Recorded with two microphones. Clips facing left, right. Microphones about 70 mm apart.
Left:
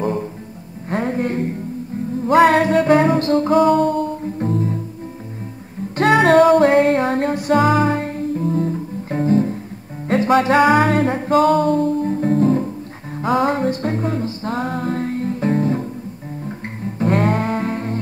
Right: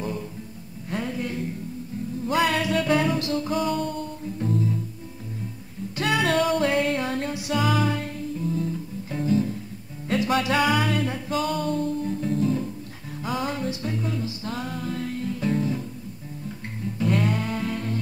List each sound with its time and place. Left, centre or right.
0.0 s music: left
5.9 s music: left